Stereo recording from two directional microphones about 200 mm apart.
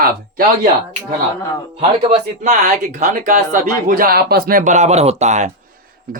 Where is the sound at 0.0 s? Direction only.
50° right (ahead or behind).